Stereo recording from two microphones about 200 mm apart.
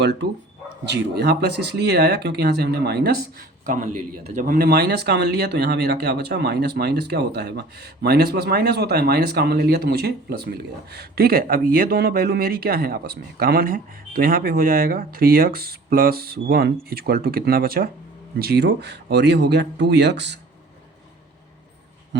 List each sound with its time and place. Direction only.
0.0 s speech: 60° right (ahead or behind)
4.4 s speech: 45° right (ahead or behind)
22.1 s dog: 60° right (ahead or behind)